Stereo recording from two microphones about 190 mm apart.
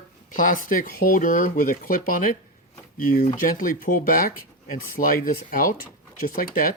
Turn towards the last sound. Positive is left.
turn(degrees=50)  # may be behind; listen again after turning